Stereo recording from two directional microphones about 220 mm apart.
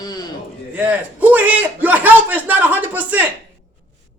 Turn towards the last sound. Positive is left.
turn(degrees=-5)  # may be behind; listen again after turning